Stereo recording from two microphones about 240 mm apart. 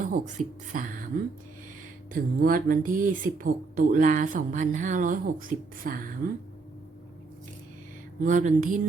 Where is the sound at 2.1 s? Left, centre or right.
Right.